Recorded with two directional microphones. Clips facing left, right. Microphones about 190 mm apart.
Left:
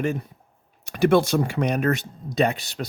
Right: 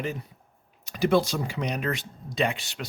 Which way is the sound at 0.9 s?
60° left (ahead or behind).